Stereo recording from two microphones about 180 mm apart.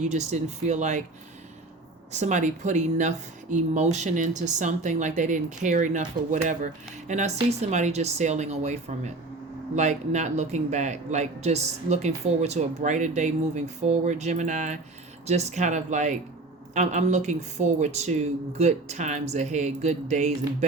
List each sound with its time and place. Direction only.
0.0 s speech: 40° right (ahead or behind)
2.1 s speech: 40° right (ahead or behind)